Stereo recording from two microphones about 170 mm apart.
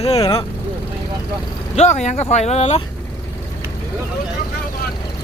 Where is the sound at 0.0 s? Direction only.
35° left (ahead or behind).